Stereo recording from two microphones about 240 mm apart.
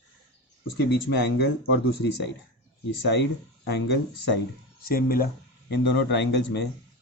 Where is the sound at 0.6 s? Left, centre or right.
Left.